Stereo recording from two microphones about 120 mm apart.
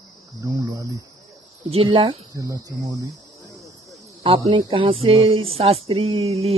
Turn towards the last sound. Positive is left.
turn(degrees=-60)  # may be behind; listen again after turning